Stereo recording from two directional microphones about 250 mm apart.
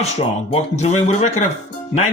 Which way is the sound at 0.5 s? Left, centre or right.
Left.